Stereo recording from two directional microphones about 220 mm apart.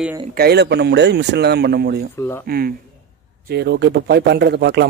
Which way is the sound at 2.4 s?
45° right (ahead or behind).